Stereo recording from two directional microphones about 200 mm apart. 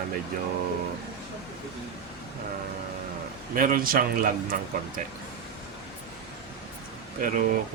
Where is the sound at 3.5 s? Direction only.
45° right (ahead or behind).